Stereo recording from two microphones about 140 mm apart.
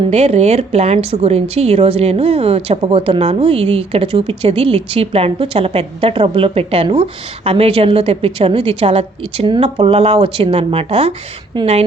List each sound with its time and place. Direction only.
0.1 s speech: 50° right (ahead or behind)
11.5 s a woman's voice: 30° right (ahead or behind)